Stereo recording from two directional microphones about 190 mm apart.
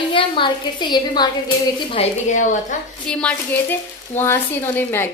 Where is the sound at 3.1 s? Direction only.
5° left (ahead or behind).